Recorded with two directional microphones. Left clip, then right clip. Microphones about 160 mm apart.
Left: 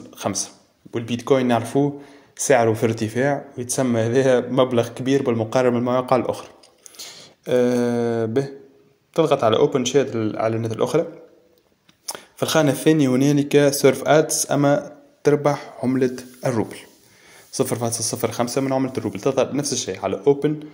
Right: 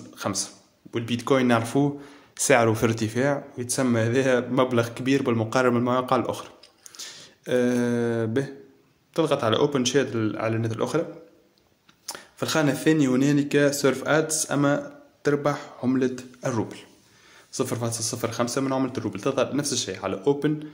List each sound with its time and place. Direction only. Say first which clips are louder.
0.1 s a man's voice: left 3 dB; 15° left (ahead or behind)
0.9 s speech: left 3 dB; centre (ahead or behind)
12.1 s speech: left 6 dB; 20° left (ahead or behind)